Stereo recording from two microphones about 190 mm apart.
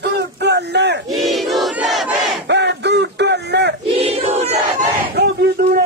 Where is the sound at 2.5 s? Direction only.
65° right (ahead or behind).